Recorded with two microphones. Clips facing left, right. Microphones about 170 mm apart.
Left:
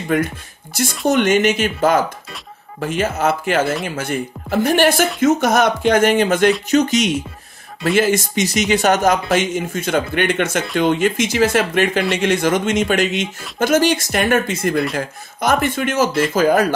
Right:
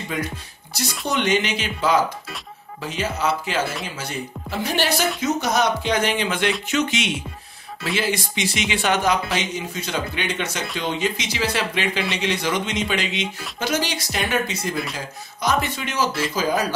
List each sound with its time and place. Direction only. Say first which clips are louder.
0.1 s speech: left 10 dB; 55° left (ahead or behind)